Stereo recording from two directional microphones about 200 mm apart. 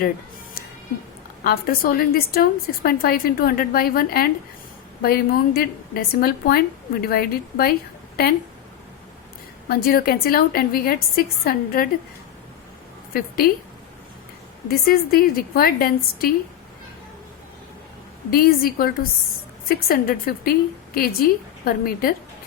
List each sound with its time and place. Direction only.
1.5 s a woman's voice: 50° left (ahead or behind)
9.6 s a woman's voice: 50° left (ahead or behind)
13.1 s a woman's voice: 50° left (ahead or behind)
14.7 s a woman's voice: 50° left (ahead or behind)
18.3 s a woman's voice: 50° left (ahead or behind)